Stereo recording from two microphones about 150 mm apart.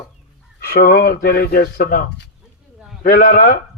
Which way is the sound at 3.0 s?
65° left (ahead or behind).